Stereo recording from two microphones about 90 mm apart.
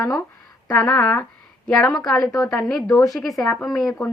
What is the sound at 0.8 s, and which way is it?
Speech, 15° left (ahead or behind).